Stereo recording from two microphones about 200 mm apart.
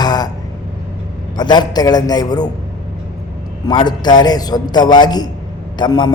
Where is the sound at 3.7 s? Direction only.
20° left (ahead or behind).